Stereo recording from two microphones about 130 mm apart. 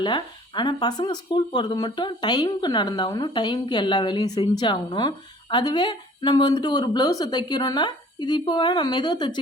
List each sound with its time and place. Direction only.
0.0 s speech: 35° left (ahead or behind)